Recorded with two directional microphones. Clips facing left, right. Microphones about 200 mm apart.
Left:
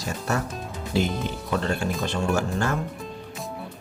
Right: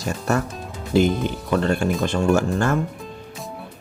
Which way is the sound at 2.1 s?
50° right (ahead or behind).